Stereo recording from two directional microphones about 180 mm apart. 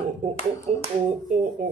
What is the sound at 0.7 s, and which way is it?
Speech, 35° right (ahead or behind).